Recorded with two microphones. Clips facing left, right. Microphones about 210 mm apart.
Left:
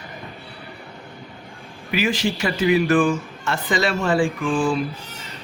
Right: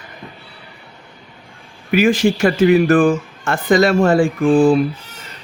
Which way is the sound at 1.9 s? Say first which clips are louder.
Right 8 dB; 50° right (ahead or behind).